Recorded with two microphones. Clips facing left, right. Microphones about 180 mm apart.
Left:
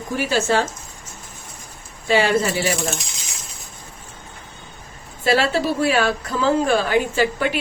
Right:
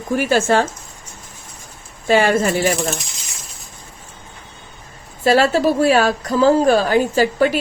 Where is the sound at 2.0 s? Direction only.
50° right (ahead or behind).